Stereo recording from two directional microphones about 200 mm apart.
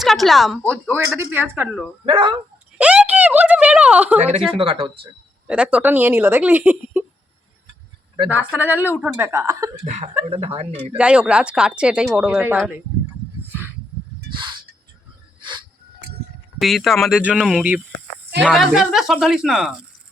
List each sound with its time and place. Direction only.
0.0 s speech: centre (ahead or behind)
0.7 s speech: 10° right (ahead or behind)
2.0 s speech: 25° right (ahead or behind)
2.7 s a sound: 5° right (ahead or behind)
4.2 s speech: 30° right (ahead or behind)
5.5 s speech: 5° right (ahead or behind)
8.3 s speech: 10° right (ahead or behind)
9.8 s speech: 35° right (ahead or behind)
10.9 s speech: 5° right (ahead or behind)
13.5 s wild animals: 10° right (ahead or behind)
15.4 s dog: 25° right (ahead or behind)
16.6 s speech: centre (ahead or behind)